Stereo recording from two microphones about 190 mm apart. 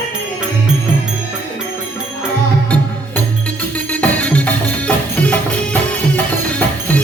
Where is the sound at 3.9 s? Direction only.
5° left (ahead or behind).